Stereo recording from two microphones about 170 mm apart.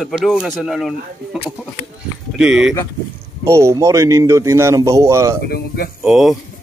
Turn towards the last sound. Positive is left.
turn(degrees=0)  # may be behind; listen again after turning